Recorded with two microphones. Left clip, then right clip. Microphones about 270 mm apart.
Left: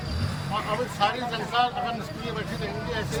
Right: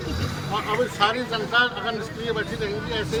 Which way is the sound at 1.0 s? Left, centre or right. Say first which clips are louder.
Right 3 dB; centre.